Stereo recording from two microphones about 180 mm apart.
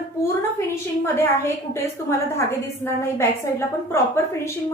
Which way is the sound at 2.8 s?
15° left (ahead or behind).